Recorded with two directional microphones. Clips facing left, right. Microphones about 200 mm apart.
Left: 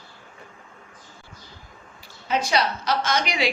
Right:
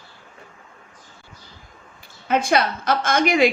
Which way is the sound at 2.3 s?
55° right (ahead or behind).